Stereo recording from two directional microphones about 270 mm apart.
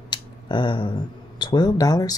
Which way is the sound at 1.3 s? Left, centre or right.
Centre.